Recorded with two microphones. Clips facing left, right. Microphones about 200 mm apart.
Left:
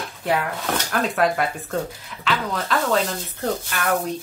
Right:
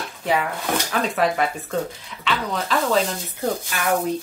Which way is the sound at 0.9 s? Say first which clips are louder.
Left 2 dB; centre (ahead or behind).